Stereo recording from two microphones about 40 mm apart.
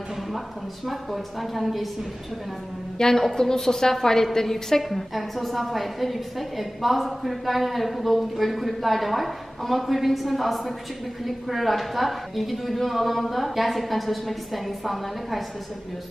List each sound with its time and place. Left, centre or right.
0.8 s a woman's voice: centre
3.0 s a woman's voice: centre